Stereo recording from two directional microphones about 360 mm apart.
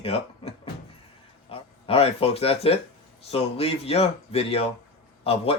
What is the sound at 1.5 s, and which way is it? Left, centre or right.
Speech, centre.